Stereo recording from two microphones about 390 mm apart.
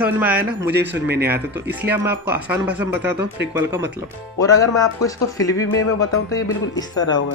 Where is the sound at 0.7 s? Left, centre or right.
Right.